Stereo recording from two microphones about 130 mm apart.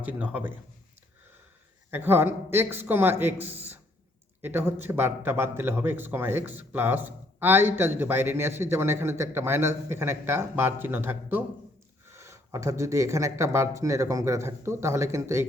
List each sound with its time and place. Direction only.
0.0 s a man's voice: 10° right (ahead or behind)
1.9 s a man's voice: 15° right (ahead or behind)